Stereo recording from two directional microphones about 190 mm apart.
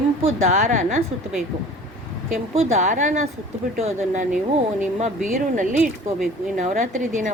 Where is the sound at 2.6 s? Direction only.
40° right (ahead or behind).